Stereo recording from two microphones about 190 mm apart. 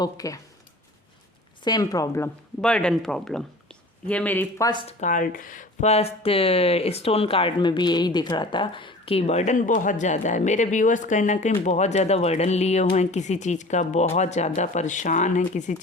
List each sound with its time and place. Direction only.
0.0 s speech: 20° left (ahead or behind)
1.6 s speech: 20° left (ahead or behind)
2.6 s speech: 5° left (ahead or behind); by 15.8 s 40° left (ahead or behind)